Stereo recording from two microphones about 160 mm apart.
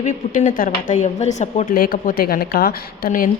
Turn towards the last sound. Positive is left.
turn(degrees=65)  # may be behind; listen again after turning